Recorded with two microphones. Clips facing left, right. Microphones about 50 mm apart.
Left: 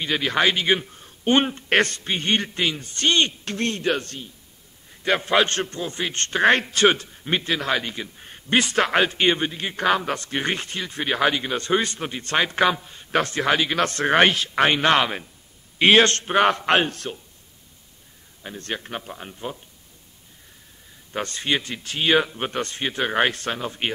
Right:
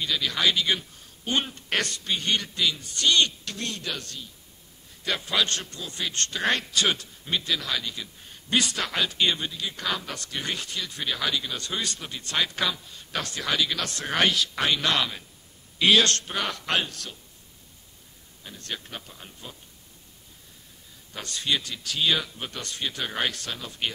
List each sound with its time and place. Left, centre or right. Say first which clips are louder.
0.0 s a man's voice: left 5 dB; left
18.4 s a man's voice: left 6 dB; left
21.1 s a man's voice: left 4 dB; left